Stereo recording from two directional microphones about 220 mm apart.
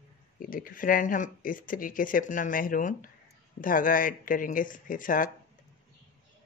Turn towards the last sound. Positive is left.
turn(degrees=40)  # may be behind; listen again after turning